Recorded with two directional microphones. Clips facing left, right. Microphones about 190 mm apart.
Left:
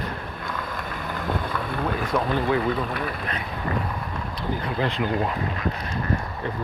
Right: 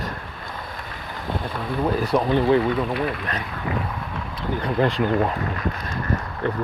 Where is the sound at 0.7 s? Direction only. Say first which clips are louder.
Left 4 dB; 50° left (ahead or behind).